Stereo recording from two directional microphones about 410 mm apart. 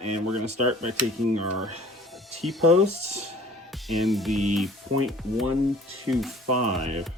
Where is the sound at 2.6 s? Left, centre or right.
Centre.